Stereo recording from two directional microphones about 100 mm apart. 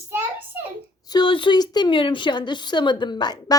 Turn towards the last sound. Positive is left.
turn(degrees=45)  # may be behind; listen again after turning